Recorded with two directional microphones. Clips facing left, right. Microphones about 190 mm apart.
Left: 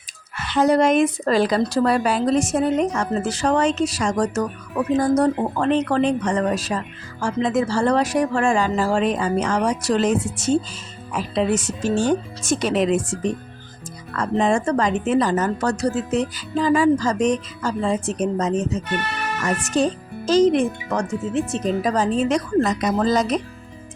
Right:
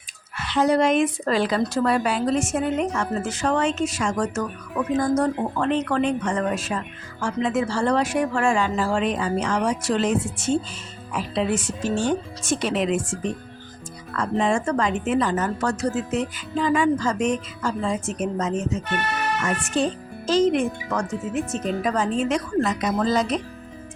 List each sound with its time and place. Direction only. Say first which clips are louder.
0.3 s speech: left 2 dB; 45° left (ahead or behind)
14.2 s speech: left 3 dB; 40° left (ahead or behind)